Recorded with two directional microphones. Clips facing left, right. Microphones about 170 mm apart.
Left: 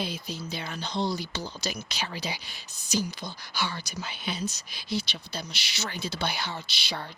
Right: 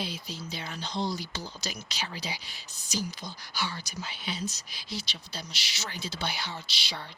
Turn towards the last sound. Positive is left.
turn(degrees=50)  # may be behind; listen again after turning